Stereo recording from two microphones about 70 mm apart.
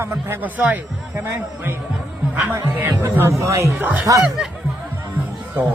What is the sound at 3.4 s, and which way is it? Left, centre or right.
Speech, right.